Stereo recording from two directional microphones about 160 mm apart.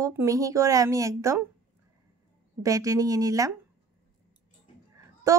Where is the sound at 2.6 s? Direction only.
20° right (ahead or behind).